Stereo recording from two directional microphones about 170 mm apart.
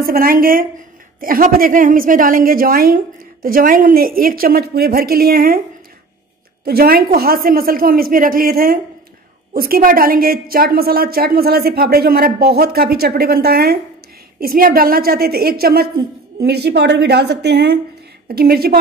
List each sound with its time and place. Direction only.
0.0 s a woman's voice: 60° right (ahead or behind)
6.6 s a woman's voice: 65° right (ahead or behind)
18.3 s a woman's voice: 65° right (ahead or behind)